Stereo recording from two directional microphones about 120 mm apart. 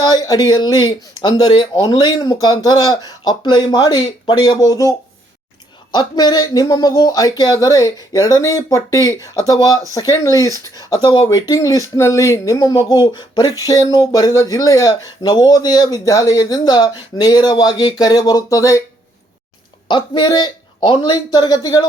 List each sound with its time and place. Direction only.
0.0 s speech: 30° left (ahead or behind)
12.7 s speech: 40° left (ahead or behind)
19.9 s speech: 40° left (ahead or behind)